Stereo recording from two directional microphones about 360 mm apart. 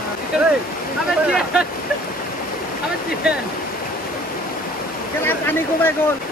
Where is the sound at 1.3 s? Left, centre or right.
Centre.